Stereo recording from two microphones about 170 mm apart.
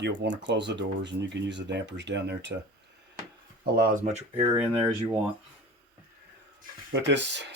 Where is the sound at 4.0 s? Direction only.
35° right (ahead or behind).